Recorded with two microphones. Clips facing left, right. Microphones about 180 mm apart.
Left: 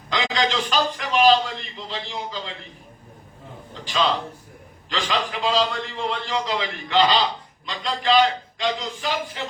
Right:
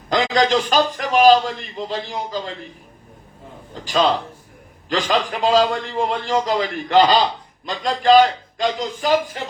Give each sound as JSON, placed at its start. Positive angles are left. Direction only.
{"t": 0.1, "sound": "a man's voice", "side_deg": -45}
{"t": 3.8, "sound": "a man's voice", "side_deg": -45}